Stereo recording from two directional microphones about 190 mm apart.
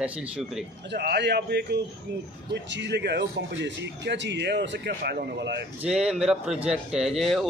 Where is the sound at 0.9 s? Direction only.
60° right (ahead or behind).